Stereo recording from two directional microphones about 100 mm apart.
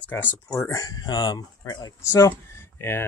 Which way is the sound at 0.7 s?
40° left (ahead or behind).